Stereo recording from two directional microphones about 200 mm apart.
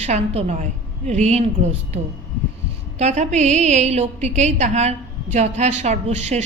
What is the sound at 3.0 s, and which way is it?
A woman's voice, 35° right (ahead or behind).